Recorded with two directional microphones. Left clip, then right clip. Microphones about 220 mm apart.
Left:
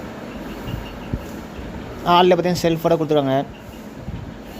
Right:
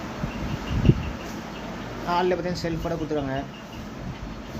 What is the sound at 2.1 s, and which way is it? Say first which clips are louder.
Speech: left 10 dB; 40° left (ahead or behind).